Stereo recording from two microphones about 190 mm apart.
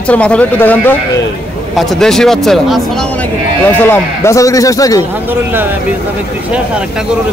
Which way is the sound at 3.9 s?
15° left (ahead or behind).